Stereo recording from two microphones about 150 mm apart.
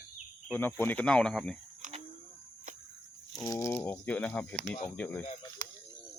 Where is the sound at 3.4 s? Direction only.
20° left (ahead or behind).